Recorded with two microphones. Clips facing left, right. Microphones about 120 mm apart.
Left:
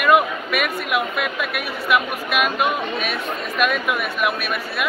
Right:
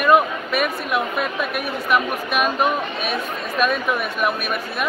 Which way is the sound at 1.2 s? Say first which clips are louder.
Right 1 dB; 35° right (ahead or behind).